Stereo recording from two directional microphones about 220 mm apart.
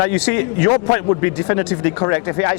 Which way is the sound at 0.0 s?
20° left (ahead or behind).